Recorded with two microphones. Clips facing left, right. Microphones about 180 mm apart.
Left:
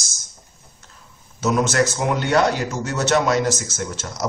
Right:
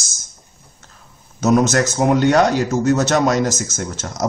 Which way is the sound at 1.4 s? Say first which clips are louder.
Right 4 dB; 45° right (ahead or behind).